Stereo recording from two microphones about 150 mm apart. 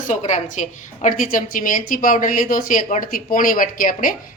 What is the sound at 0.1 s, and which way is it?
Speech, 50° left (ahead or behind).